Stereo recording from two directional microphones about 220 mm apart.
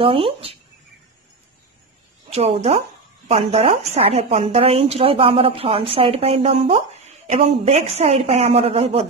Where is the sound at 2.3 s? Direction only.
25° right (ahead or behind).